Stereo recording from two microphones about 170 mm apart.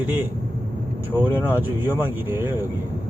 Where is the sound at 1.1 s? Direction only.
10° right (ahead or behind).